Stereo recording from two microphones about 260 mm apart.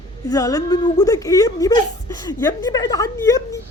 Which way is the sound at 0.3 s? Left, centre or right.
Centre.